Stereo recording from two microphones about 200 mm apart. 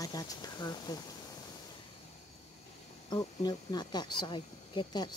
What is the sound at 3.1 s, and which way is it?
Speech, 20° left (ahead or behind).